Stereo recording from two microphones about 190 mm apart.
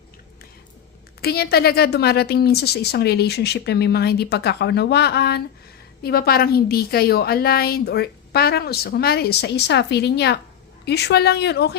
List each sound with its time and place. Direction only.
1.2 s a woman's voice: 55° left (ahead or behind)